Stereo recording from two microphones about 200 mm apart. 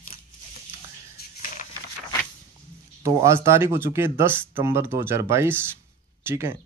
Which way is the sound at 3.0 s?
15° right (ahead or behind).